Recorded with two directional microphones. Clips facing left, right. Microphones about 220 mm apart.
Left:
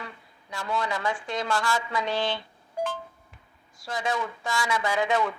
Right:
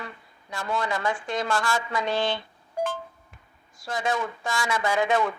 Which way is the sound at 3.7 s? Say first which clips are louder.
Right 2 dB; 50° right (ahead or behind).